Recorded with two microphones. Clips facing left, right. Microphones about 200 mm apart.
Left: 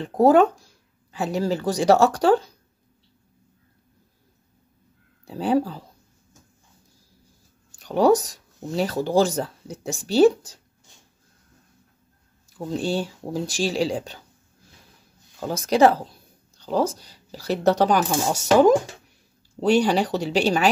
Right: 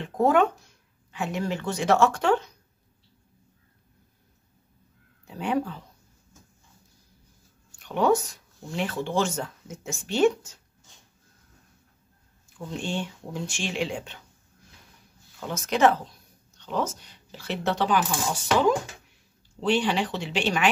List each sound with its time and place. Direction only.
0.0 s speech: 35° left (ahead or behind)
5.2 s speech: 35° left (ahead or behind)
7.8 s speech: 35° left (ahead or behind)
12.4 s speech: 35° left (ahead or behind)
15.4 s speech: 35° left (ahead or behind)